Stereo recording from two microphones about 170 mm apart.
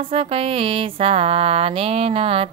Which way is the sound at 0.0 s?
35° right (ahead or behind).